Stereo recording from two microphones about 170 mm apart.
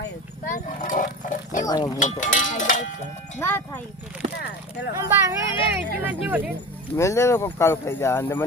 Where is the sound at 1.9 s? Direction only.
45° left (ahead or behind).